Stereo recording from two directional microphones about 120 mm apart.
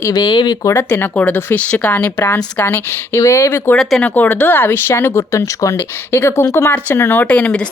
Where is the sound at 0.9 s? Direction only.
15° left (ahead or behind).